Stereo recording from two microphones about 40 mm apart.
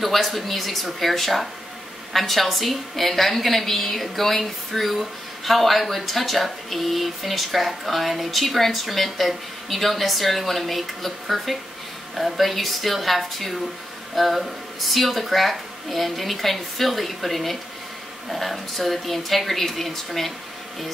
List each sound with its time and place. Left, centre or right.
0.0 s a woman's voice: centre